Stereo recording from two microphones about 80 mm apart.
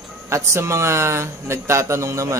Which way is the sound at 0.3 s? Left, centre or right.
Right.